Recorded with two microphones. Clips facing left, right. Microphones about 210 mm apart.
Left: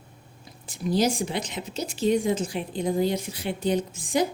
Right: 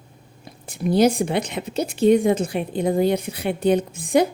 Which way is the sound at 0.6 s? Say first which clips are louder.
Right 6 dB; 60° right (ahead or behind).